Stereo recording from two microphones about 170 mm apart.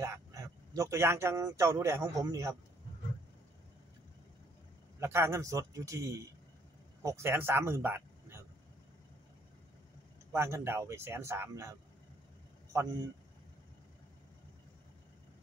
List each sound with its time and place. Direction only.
0.0 s speech: 20° right (ahead or behind)
5.0 s speech: 15° right (ahead or behind)
10.3 s speech: 15° right (ahead or behind)